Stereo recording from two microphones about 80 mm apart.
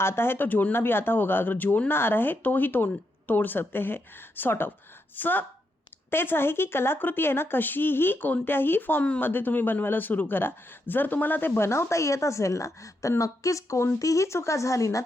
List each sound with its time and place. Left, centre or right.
0.0 s speech: left